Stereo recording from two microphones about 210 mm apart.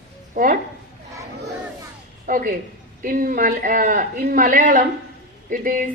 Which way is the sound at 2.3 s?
40° right (ahead or behind).